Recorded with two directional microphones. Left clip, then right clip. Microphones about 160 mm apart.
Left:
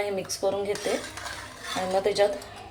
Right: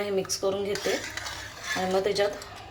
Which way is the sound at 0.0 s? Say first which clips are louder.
Even; centre (ahead or behind).